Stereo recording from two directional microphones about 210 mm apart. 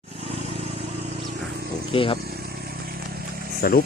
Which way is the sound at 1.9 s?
25° left (ahead or behind).